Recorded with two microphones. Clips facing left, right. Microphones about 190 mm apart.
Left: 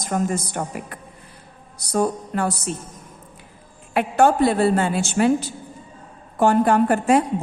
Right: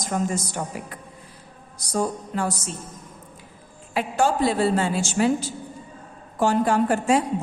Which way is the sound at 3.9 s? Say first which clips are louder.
Left 5 dB; 60° left (ahead or behind).